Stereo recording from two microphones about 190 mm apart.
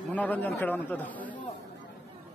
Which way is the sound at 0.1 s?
10° left (ahead or behind).